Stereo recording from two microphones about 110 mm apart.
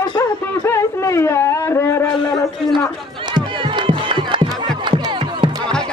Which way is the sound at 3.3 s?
45° right (ahead or behind).